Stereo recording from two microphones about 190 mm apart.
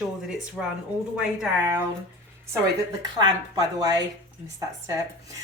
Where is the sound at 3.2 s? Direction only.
20° right (ahead or behind).